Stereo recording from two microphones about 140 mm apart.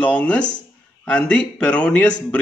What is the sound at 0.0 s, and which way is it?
A man's voice, 10° left (ahead or behind).